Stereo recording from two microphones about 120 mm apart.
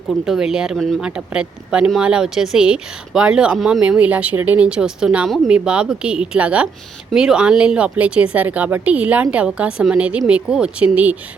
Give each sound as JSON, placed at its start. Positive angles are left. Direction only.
{"t": 0.3, "sound": "speech", "side_deg": -5}